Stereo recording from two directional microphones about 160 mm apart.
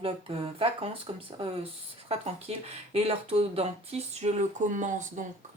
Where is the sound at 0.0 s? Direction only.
35° right (ahead or behind).